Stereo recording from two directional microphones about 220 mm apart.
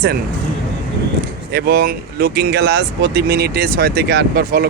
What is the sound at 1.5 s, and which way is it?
Speech, 45° right (ahead or behind).